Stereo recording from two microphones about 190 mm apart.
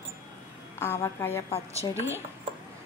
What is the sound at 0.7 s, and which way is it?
Speech, 15° left (ahead or behind).